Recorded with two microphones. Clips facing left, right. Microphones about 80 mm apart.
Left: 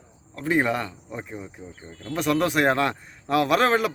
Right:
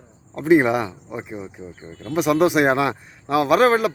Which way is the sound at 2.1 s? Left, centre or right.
Centre.